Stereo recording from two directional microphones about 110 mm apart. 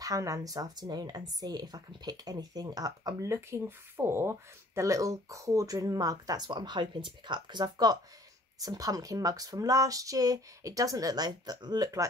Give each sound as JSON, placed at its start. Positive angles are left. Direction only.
{"t": 0.0, "sound": "speech", "side_deg": -30}